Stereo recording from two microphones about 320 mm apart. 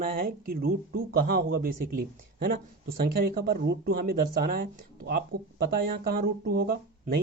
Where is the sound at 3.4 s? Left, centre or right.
Right.